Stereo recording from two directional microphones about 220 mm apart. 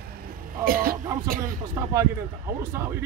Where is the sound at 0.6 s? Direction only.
40° right (ahead or behind).